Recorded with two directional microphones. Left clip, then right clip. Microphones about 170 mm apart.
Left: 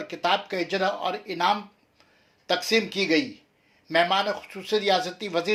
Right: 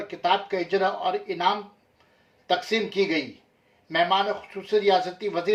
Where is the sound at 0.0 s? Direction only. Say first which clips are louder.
Right 1 dB; 25° left (ahead or behind).